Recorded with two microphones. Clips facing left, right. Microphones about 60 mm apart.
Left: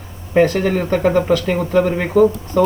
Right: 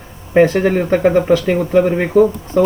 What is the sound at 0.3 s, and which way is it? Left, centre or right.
Speech, centre.